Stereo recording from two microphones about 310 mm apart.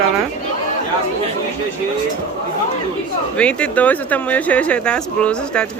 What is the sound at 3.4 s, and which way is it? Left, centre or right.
Speech, centre.